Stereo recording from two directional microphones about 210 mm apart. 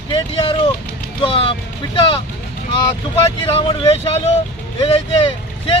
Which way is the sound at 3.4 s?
25° left (ahead or behind).